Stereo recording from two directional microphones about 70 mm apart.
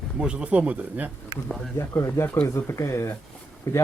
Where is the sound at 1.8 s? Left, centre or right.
Left.